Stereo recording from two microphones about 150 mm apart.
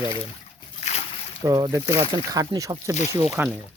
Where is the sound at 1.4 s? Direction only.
25° right (ahead or behind).